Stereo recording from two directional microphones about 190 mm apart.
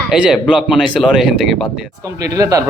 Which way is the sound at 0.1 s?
5° right (ahead or behind).